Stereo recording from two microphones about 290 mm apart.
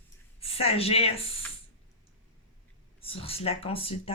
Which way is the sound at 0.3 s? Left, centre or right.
Centre.